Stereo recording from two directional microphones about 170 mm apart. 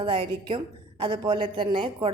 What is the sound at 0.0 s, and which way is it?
A woman's voice, 30° right (ahead or behind).